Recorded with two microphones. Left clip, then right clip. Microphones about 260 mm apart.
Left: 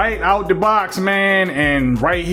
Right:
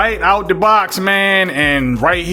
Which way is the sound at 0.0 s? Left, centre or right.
Centre.